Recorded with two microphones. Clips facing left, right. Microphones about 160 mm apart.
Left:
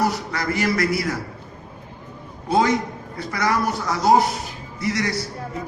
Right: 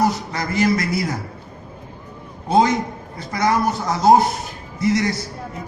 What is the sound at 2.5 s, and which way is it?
Speech, 20° right (ahead or behind).